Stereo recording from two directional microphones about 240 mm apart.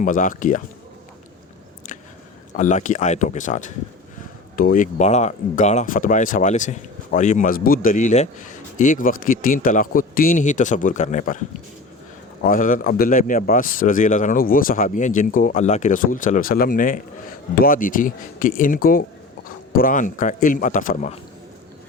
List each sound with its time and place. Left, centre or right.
0.0 s speech: left
2.5 s speech: left
12.4 s speech: left